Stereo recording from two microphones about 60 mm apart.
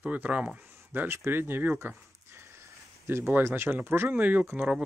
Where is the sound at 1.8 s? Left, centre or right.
Right.